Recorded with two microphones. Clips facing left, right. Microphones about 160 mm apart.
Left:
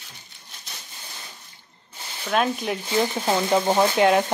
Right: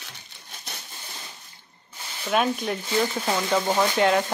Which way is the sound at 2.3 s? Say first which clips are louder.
Left 1 dB; centre (ahead or behind).